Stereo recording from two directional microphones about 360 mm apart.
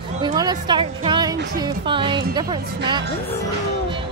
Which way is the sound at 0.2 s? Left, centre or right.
Centre.